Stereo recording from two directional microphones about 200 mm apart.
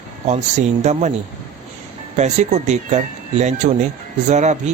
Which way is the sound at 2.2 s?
35° right (ahead or behind).